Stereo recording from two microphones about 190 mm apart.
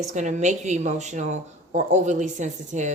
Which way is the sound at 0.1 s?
40° right (ahead or behind).